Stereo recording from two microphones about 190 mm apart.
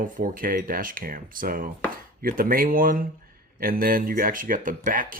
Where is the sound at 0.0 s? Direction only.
45° right (ahead or behind).